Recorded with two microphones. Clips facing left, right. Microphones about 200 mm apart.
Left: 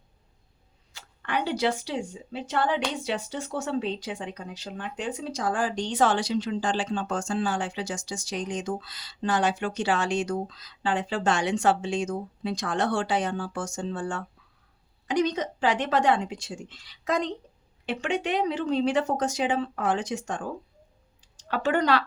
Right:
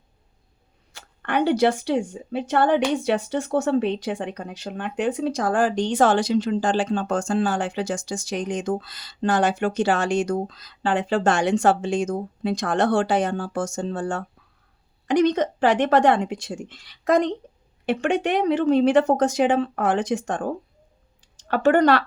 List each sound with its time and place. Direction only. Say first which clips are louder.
0.9 s a sound: right 7 dB; 55° right (ahead or behind)
1.8 s a woman's voice: right 8 dB; 55° right (ahead or behind)
15.0 s a woman's voice: right 6 dB; 55° right (ahead or behind)